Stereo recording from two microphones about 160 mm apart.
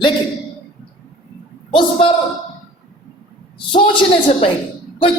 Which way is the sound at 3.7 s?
30° left (ahead or behind).